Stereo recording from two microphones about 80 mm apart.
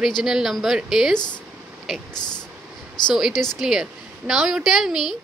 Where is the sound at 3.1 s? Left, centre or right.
Centre.